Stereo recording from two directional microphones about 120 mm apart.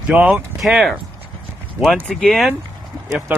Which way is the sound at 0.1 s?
10° right (ahead or behind).